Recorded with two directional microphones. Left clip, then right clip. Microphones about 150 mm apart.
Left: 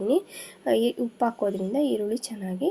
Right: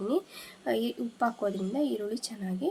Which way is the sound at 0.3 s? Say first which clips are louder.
Left 7 dB; 15° left (ahead or behind).